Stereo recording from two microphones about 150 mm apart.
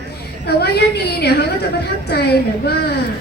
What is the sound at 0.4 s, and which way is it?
A woman's voice, 90° left.